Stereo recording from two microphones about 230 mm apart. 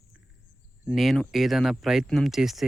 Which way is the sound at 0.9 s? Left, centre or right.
Centre.